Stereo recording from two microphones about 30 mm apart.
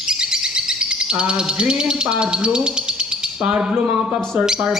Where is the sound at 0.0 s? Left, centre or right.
Right.